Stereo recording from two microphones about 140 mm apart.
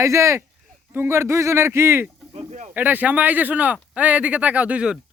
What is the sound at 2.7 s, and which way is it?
Speech, 10° right (ahead or behind).